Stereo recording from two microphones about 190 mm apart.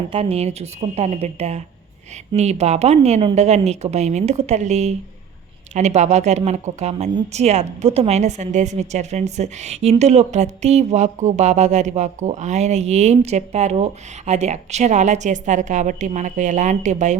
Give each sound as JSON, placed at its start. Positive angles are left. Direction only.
{"t": 0.1, "sound": "a woman's voice", "side_deg": -30}